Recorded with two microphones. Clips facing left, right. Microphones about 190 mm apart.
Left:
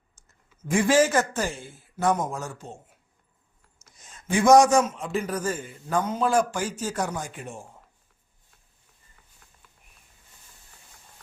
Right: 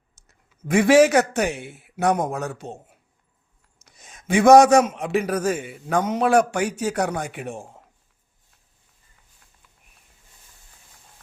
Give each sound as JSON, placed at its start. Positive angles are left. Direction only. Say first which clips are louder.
{"t": 0.2, "sound": "a sound", "louder": "right 2 dB", "side_deg": -70}
{"t": 0.7, "sound": "a man's voice", "louder": "right 6 dB", "side_deg": -65}
{"t": 3.8, "sound": "a man's voice", "louder": "right 4 dB", "side_deg": -70}